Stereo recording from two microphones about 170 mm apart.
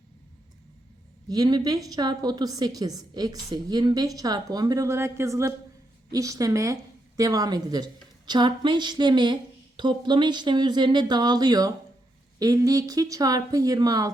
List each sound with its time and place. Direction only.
1.3 s a woman's voice: 25° right (ahead or behind)